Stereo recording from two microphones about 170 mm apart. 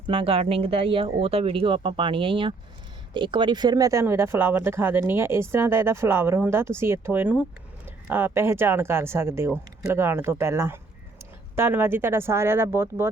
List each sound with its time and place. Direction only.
0.1 s speech: 30° right (ahead or behind); by 13.1 s 15° right (ahead or behind)